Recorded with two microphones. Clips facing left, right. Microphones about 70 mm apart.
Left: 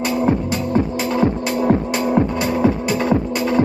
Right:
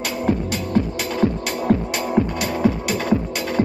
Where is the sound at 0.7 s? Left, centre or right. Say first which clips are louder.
Left 2 dB; left.